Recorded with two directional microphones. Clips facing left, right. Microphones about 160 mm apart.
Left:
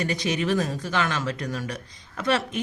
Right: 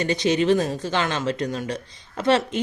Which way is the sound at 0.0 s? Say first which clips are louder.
Right 5 dB; 25° right (ahead or behind).